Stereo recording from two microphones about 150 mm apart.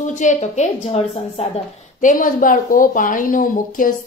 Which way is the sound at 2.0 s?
65° left (ahead or behind).